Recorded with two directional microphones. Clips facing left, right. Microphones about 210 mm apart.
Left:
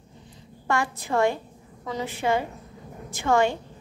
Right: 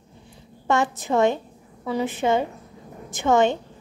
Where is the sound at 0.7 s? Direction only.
20° right (ahead or behind).